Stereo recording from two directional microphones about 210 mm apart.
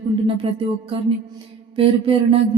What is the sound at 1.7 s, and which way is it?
Speech, 25° right (ahead or behind).